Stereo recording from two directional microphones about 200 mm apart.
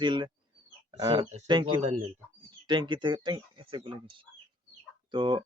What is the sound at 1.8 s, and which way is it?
Speech, 35° right (ahead or behind).